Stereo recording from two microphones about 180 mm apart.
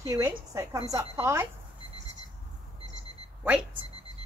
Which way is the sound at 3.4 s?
10° right (ahead or behind).